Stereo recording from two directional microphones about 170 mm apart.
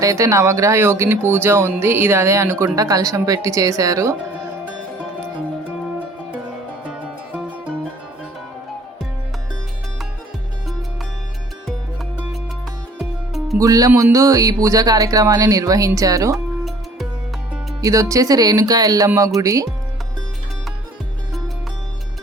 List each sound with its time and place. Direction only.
0.0 s speech: 20° right (ahead or behind)
13.0 s music: centre (ahead or behind)
13.6 s speech: 20° right (ahead or behind)
16.3 s music: centre (ahead or behind)
17.7 s speech: 20° right (ahead or behind)